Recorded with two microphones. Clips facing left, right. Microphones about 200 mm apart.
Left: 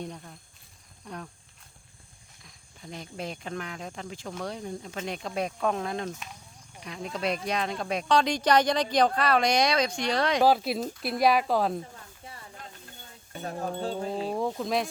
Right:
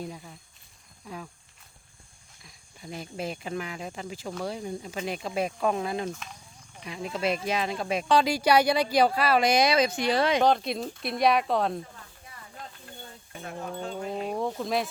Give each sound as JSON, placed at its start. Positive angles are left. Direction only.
{"t": 0.0, "sound": "speech", "side_deg": -5}
{"t": 2.4, "sound": "speech", "side_deg": -5}
{"t": 13.4, "sound": "wind chime", "side_deg": 35}
{"t": 14.3, "sound": "speech", "side_deg": 0}